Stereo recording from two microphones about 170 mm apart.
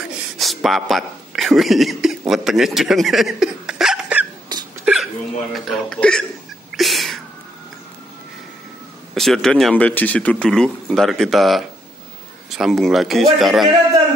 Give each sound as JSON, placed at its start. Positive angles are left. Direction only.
{"t": 0.4, "sound": "speech", "side_deg": 0}
{"t": 4.5, "sound": "hiccup", "side_deg": -25}
{"t": 4.9, "sound": "hiccup", "side_deg": -5}
{"t": 5.5, "sound": "speech", "side_deg": 0}
{"t": 6.7, "sound": "a sound", "side_deg": 0}
{"t": 9.1, "sound": "speech", "side_deg": 0}